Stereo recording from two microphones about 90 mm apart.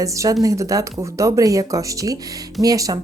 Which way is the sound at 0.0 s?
35° right (ahead or behind).